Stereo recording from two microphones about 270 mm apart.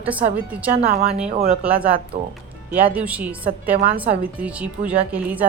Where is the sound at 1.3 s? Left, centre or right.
Right.